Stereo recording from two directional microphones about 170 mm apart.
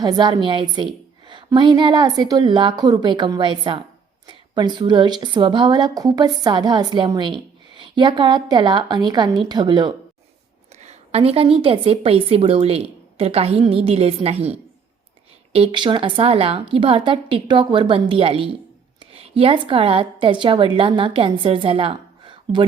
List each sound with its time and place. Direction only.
0.0 s a woman's voice: 25° right (ahead or behind)
10.8 s a woman's voice: 40° right (ahead or behind)
15.5 s a woman's voice: 30° right (ahead or behind)